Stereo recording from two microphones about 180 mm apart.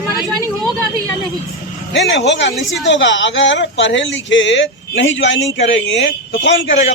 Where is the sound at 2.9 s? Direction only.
90° left.